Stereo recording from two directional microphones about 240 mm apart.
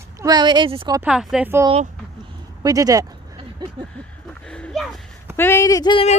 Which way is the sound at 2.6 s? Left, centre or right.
Centre.